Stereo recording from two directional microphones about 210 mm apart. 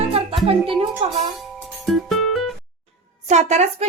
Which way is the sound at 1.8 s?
Centre (ahead or behind).